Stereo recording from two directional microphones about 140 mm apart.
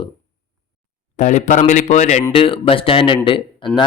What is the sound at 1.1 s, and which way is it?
A man's voice, 60° left (ahead or behind).